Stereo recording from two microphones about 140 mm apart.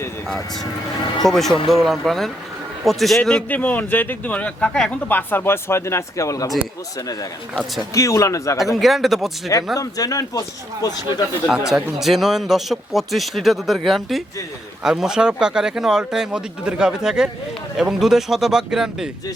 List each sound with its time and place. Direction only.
1.2 s a man's voice: centre (ahead or behind); by 6.5 s 25° left (ahead or behind)
7.5 s speech: centre (ahead or behind)
7.9 s speech: 25° left (ahead or behind)
8.5 s speech: centre (ahead or behind)
9.7 s speech: 25° left (ahead or behind)
11.4 s speech: 5° right (ahead or behind)